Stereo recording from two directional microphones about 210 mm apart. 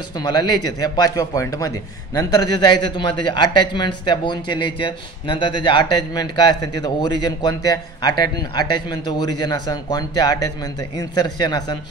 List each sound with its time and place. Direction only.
0.2 s a man's voice: 20° left (ahead or behind)